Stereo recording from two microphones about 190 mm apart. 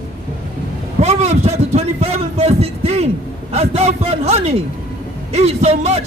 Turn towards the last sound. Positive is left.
turn(degrees=-35)  # may be behind; listen again after turning